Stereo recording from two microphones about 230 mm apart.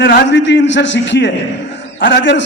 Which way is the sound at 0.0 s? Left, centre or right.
Left.